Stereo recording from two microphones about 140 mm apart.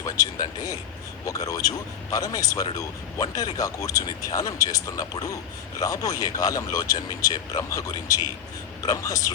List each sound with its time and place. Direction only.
0.0 s speech: 25° left (ahead or behind)